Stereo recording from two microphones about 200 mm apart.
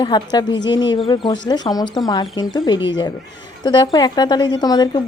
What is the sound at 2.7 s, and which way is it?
Speech, 65° left (ahead or behind).